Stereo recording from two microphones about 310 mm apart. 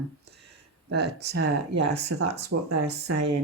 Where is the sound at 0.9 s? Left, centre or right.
Right.